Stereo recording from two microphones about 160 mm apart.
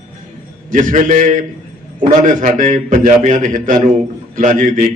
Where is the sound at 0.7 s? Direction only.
50° right (ahead or behind).